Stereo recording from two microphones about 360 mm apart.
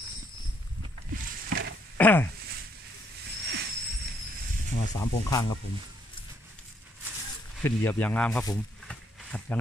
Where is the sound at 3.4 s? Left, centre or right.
Right.